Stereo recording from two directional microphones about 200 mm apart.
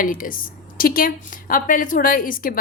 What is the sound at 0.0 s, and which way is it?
A woman's voice, 45° left (ahead or behind).